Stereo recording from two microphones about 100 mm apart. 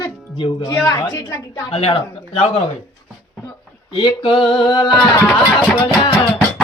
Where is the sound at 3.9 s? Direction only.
60° left (ahead or behind).